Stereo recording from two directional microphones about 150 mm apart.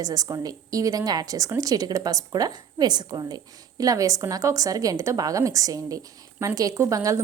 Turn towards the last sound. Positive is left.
turn(degrees=-20)  # may be behind; listen again after turning